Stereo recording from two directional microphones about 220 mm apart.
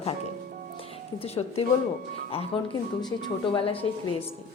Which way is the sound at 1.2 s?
30° left (ahead or behind).